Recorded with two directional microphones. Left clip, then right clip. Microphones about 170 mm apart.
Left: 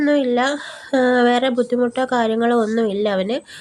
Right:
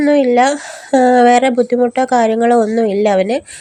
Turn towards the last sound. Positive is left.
turn(degrees=-25)  # may be behind; listen again after turning